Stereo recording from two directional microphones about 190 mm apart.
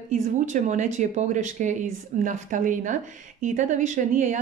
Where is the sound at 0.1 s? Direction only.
40° right (ahead or behind).